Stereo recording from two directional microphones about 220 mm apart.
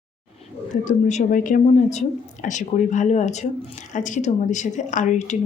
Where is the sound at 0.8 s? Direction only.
35° left (ahead or behind).